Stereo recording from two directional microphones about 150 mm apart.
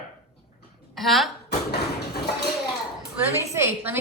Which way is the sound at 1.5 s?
90° left.